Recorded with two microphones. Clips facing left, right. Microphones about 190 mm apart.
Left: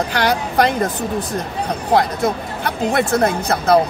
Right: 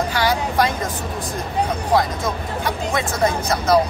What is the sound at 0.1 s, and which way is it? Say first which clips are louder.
Speech: left 2 dB; 65° left (ahead or behind).